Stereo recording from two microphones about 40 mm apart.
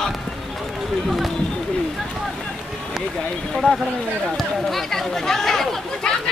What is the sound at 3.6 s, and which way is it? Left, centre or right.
Speech, left.